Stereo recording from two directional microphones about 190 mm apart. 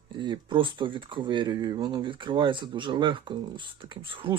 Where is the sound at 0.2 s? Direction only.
25° right (ahead or behind).